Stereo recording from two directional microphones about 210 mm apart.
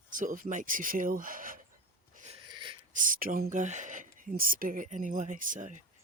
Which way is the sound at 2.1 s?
40° right (ahead or behind).